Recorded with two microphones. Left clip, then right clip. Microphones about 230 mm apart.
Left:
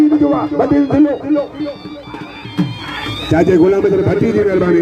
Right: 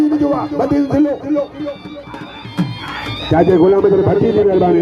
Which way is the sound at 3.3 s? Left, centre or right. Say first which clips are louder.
Even; left.